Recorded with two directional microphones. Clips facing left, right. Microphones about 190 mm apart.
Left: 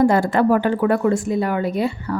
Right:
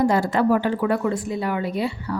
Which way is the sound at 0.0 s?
55° left (ahead or behind).